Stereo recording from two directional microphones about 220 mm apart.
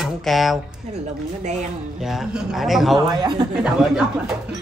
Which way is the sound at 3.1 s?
20° right (ahead or behind).